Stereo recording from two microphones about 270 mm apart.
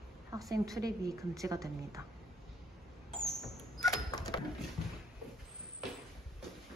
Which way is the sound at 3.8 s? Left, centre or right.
Centre.